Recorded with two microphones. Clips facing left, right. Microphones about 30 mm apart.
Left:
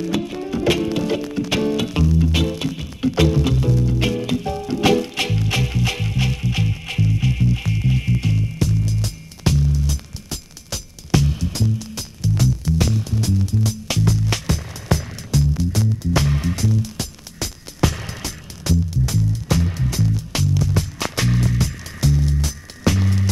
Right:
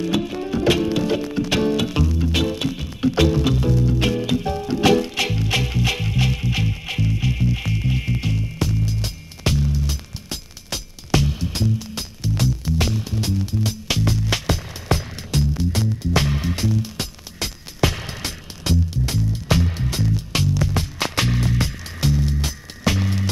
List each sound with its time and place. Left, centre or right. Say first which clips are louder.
0.1 s music: right 1 dB; centre
8.5 s music: left 2 dB; centre
11.2 s music: left 2 dB; centre
11.5 s music: even; right
12.7 s music: left 2 dB; centre
13.2 s music: left 1 dB; right
16.3 s music: left 2 dB; centre
17.0 s music: right 1 dB; right
17.9 s music: even; centre
18.2 s music: right 1 dB; right; by 21.5 s centre
21.5 s music: even; right
22.1 s music: left 1 dB; centre